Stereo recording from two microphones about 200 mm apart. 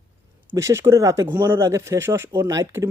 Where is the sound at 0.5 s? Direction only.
15° right (ahead or behind).